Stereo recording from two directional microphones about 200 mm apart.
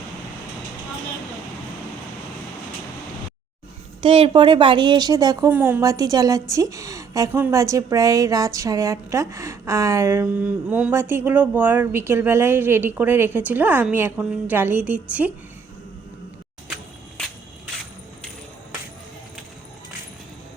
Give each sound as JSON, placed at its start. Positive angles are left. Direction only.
{"t": 4.0, "sound": "a woman's voice", "side_deg": -25}